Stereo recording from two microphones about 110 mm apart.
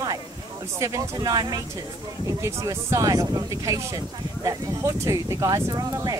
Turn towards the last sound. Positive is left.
turn(degrees=-35)  # may be behind; listen again after turning